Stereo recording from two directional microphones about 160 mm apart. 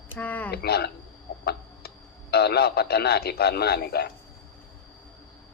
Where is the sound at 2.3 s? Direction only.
85° left.